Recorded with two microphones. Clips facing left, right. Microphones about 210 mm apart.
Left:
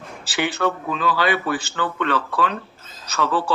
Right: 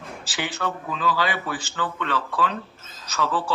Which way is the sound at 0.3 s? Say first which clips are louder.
Left 7 dB; 65° left (ahead or behind).